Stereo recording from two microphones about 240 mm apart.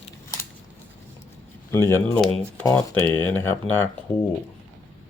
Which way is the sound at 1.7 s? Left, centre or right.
Centre.